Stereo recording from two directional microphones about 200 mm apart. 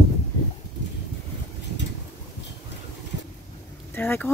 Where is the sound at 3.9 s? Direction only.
10° left (ahead or behind).